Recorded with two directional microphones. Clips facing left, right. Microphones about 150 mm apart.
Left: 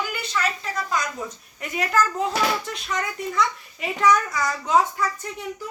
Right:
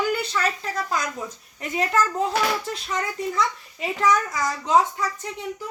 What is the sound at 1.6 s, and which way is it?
A child's voice, 25° right (ahead or behind).